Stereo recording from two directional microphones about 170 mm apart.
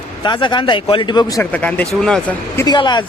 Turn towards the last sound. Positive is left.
turn(degrees=25)  # may be behind; listen again after turning